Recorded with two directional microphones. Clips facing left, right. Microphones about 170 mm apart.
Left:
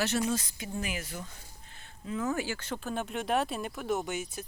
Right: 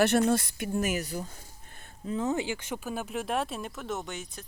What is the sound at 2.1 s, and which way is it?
Speech, 25° right (ahead or behind).